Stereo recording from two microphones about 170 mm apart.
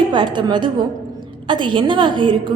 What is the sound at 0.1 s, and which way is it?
A woman's voice, 25° right (ahead or behind).